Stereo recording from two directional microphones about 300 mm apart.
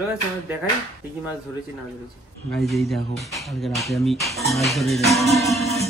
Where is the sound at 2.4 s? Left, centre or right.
Centre.